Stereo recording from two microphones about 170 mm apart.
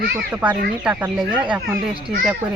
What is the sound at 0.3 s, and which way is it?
Speech, 10° right (ahead or behind).